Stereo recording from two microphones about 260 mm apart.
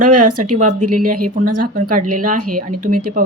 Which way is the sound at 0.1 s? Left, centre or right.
Right.